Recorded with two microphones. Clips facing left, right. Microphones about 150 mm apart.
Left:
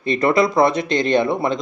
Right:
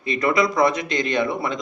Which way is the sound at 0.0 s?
30° left (ahead or behind).